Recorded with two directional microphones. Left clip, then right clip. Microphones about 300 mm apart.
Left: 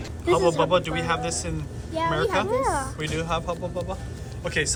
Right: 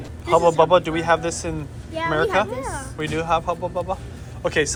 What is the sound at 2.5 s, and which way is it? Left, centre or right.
Speech, left.